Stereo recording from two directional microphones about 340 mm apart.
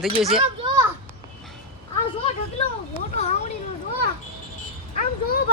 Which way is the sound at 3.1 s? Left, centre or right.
Centre.